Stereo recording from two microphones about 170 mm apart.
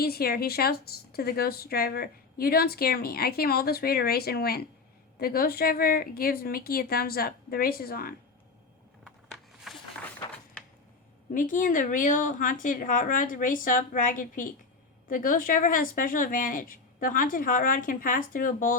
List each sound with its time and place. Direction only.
0.0 s speech: 65° left (ahead or behind)
9.0 s a sound: centre (ahead or behind)
11.3 s speech: 50° left (ahead or behind)